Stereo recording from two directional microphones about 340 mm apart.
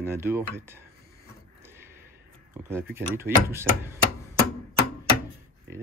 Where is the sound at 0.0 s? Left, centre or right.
Centre.